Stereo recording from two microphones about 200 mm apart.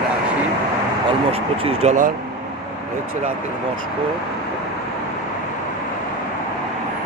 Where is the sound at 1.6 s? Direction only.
35° right (ahead or behind).